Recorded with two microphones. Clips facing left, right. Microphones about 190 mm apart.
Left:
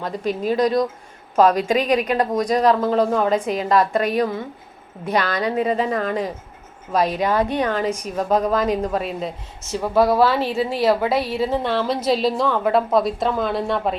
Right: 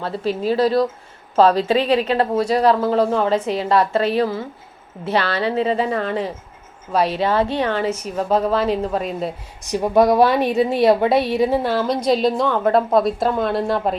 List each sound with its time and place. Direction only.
0.3 s a woman's voice: 35° right (ahead or behind)
2.1 s a woman's voice: 15° left (ahead or behind)
2.5 s a woman's voice: 35° right (ahead or behind)
7.9 s a woman's voice: 15° left (ahead or behind)
8.5 s a woman's voice: 30° right (ahead or behind)
9.6 s a woman's voice: 15° right (ahead or behind); by 13.9 s centre (ahead or behind)